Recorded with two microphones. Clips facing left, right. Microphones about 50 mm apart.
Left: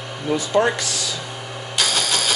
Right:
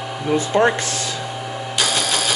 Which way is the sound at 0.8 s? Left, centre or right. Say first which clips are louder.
Right 2 dB; right.